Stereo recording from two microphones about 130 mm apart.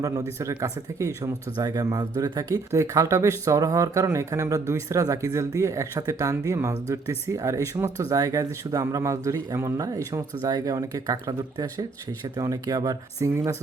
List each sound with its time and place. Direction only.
0.0 s speech: 25° right (ahead or behind)